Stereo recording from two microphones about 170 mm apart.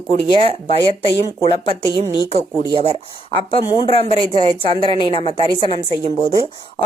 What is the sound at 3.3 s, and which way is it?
Speech, 30° left (ahead or behind).